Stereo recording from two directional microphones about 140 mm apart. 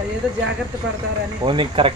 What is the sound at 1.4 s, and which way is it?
Speech, 40° right (ahead or behind).